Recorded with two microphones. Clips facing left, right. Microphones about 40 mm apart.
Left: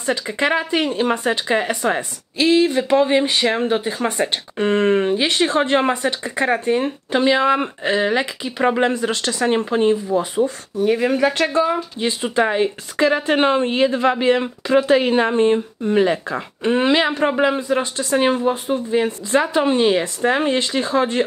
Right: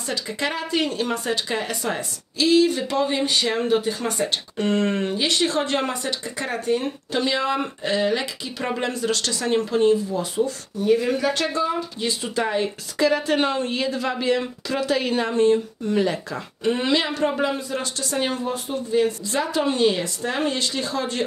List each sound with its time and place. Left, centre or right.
0.0 s speech: left